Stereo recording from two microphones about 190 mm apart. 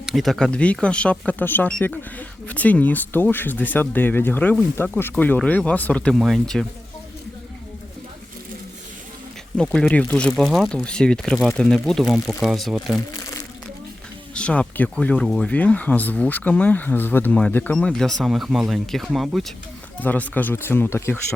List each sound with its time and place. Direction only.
0.0 s speech: centre (ahead or behind)
9.6 s speech: 5° left (ahead or behind)
14.3 s speech: 5° left (ahead or behind)